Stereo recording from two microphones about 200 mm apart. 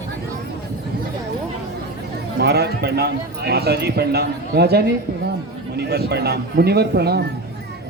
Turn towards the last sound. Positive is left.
turn(degrees=-55)  # may be behind; listen again after turning